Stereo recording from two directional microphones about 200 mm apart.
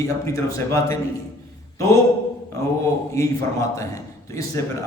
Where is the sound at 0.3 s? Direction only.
15° left (ahead or behind).